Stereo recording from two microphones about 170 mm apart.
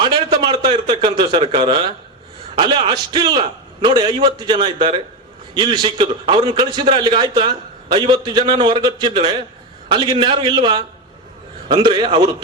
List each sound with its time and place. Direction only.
0.0 s a man's voice: 30° right (ahead or behind)